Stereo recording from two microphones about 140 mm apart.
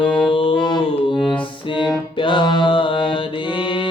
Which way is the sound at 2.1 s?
35° left (ahead or behind).